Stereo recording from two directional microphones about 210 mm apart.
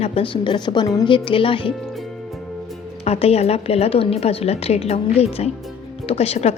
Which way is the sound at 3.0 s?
30° left (ahead or behind).